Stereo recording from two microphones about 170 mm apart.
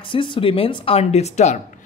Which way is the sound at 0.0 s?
30° left (ahead or behind).